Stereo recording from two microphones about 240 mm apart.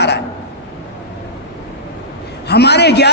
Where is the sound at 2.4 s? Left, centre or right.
Left.